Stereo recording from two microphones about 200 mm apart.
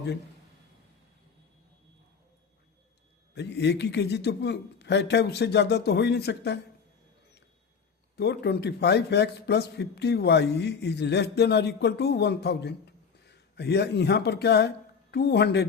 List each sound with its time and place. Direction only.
3.3 s a man's voice: 55° left (ahead or behind)
8.1 s a man's voice: 55° left (ahead or behind)